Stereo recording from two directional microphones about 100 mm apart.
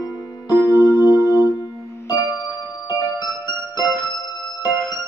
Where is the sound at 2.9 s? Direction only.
40° left (ahead or behind).